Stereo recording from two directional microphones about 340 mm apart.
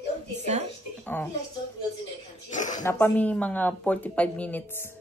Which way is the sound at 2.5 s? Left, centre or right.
Left.